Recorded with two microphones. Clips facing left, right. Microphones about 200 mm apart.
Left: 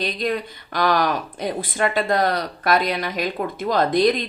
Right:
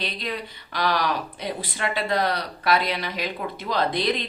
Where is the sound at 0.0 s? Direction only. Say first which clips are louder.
Left 7 dB; 45° left (ahead or behind).